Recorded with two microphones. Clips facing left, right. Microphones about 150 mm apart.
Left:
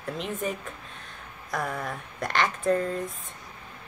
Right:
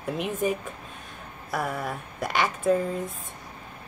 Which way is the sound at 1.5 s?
5° right (ahead or behind).